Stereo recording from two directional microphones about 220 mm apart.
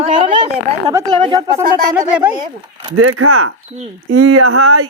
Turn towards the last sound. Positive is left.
turn(degrees=-80)